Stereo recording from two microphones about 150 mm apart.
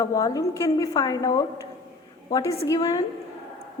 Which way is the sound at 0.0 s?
20° left (ahead or behind).